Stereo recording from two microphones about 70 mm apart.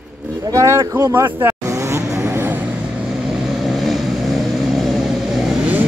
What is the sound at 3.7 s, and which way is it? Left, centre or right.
Vehicle, centre.